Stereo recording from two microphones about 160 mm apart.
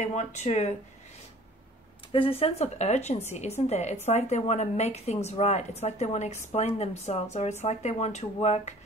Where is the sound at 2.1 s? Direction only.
35° left (ahead or behind).